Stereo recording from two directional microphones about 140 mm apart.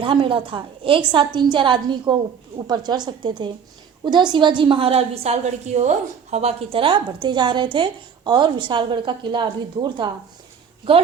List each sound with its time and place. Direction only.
0.0 s a woman's voice: 40° right (ahead or behind)